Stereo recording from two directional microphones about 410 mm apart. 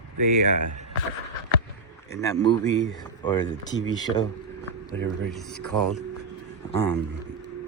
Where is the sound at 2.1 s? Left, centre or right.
Centre.